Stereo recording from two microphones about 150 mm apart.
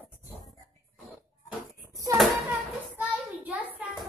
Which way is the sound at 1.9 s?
20° right (ahead or behind).